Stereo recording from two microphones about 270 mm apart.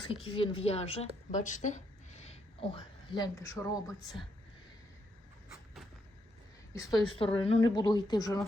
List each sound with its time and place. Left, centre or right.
0.1 s a woman's voice: centre
6.7 s a woman's voice: centre